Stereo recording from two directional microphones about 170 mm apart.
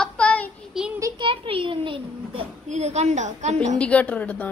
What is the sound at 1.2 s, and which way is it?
A child's voice, 30° right (ahead or behind).